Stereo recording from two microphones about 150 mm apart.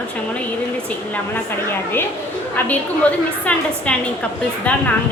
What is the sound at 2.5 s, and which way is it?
A woman's voice, 10° left (ahead or behind).